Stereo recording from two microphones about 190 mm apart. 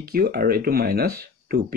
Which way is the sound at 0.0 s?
55° right (ahead or behind).